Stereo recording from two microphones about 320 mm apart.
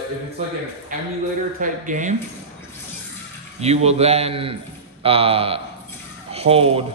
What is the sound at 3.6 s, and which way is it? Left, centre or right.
A man's voice, centre.